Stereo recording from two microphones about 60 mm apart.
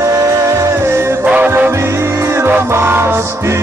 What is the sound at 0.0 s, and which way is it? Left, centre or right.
Music, right.